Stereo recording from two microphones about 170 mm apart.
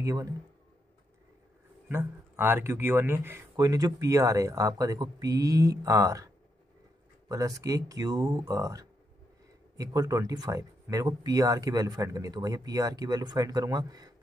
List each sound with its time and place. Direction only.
0.0 s speech: 20° right (ahead or behind)
1.9 s speech: 15° right (ahead or behind)